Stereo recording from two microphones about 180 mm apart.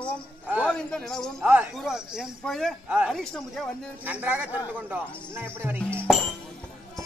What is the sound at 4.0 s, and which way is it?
Speech, 10° right (ahead or behind).